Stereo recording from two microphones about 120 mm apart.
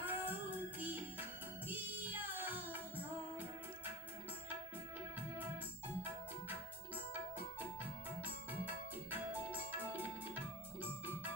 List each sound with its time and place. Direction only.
0.0 s music: 15° right (ahead or behind)
8.2 s music: 15° right (ahead or behind)